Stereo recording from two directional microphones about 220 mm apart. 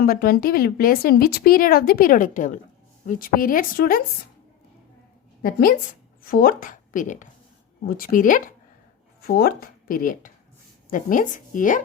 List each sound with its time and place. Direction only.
0.0 s speech: 40° left (ahead or behind)
5.4 s speech: 40° left (ahead or behind)